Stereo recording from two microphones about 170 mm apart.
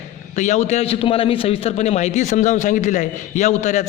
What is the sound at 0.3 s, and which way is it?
A man's voice, 45° left (ahead or behind).